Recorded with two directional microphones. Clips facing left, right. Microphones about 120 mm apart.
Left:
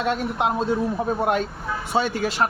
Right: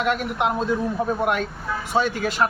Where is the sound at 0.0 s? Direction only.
30° left (ahead or behind).